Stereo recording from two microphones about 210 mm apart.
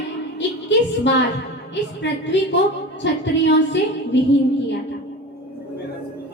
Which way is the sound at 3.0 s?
60° left (ahead or behind).